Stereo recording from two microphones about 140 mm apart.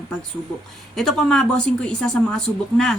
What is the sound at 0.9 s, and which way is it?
A woman's voice, 5° left (ahead or behind).